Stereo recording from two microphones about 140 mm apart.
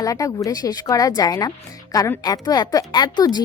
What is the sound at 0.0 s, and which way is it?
Speech, 25° left (ahead or behind).